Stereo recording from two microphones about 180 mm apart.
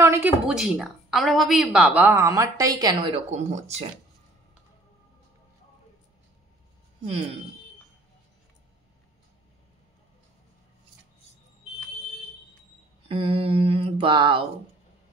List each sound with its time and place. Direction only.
0.0 s a sound: 15° right (ahead or behind)
0.5 s a woman's voice: 5° right (ahead or behind); by 3.2 s 25° right (ahead or behind)
3.3 s mantra: 40° right (ahead or behind)
13.1 s mantra: 30° right (ahead or behind)